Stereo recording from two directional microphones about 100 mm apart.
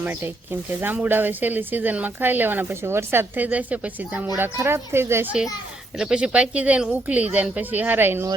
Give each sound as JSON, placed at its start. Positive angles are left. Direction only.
{"t": 0.0, "sound": "speech", "side_deg": -20}
{"t": 6.0, "sound": "speech", "side_deg": -10}